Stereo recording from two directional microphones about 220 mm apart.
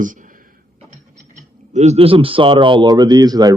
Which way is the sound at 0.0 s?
35° right (ahead or behind).